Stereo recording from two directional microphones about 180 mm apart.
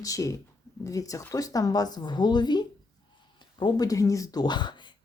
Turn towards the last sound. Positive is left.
turn(degrees=25)  # may be behind; listen again after turning